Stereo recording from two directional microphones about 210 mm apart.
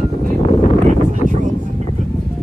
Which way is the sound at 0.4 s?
30° left (ahead or behind).